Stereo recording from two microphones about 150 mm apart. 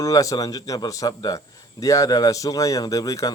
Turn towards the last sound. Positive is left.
turn(degrees=25)  # may be behind; listen again after turning